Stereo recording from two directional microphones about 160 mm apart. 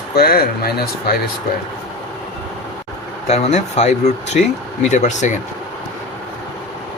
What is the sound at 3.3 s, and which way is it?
Speech, 40° left (ahead or behind).